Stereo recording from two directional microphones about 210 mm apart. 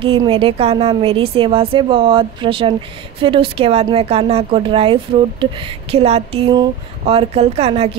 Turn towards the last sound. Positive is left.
turn(degrees=-30)  # may be behind; listen again after turning